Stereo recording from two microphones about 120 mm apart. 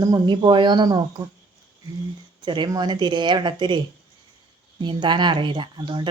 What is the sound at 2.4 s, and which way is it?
Speech, 40° right (ahead or behind).